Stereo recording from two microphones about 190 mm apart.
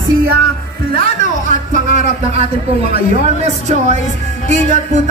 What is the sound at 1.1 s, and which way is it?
A man's voice, 40° right (ahead or behind).